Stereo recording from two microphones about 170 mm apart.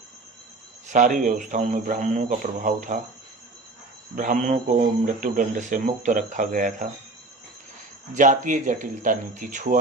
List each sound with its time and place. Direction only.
0.9 s a man's voice: 45° right (ahead or behind)
4.1 s a man's voice: 50° right (ahead or behind)
8.1 s a man's voice: 50° right (ahead or behind)